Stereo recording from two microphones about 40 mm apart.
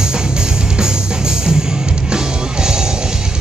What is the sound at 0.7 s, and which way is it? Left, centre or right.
Music, centre.